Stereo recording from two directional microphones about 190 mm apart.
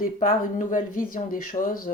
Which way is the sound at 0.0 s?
45° left (ahead or behind).